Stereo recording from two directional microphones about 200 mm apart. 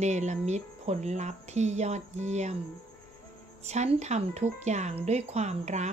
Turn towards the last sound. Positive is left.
turn(degrees=-35)  # may be behind; listen again after turning